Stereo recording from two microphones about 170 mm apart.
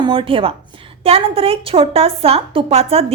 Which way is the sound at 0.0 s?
30° right (ahead or behind).